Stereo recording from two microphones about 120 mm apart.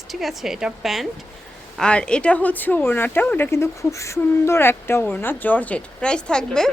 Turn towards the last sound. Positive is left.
turn(degrees=5)  # may be behind; listen again after turning